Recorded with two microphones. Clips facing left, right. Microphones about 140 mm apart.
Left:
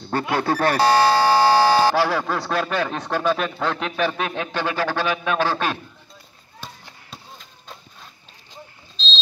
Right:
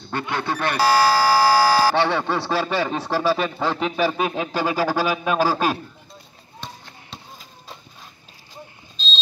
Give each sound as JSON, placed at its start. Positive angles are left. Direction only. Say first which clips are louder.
{"t": 0.1, "sound": "doorbell", "louder": "left 4 dB", "side_deg": 40}
{"t": 2.0, "sound": "speech", "louder": "even", "side_deg": 0}